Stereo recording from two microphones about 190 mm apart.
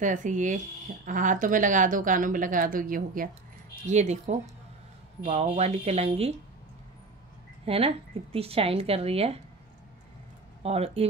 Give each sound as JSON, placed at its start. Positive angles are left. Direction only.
{"t": 0.0, "sound": "a woman's voice", "side_deg": -40}
{"t": 7.6, "sound": "speech", "side_deg": -30}
{"t": 10.6, "sound": "speech", "side_deg": -30}